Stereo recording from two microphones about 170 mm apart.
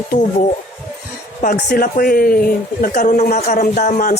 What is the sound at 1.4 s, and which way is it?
Speech, 50° left (ahead or behind).